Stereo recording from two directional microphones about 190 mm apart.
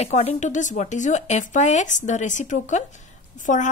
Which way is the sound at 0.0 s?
35° left (ahead or behind).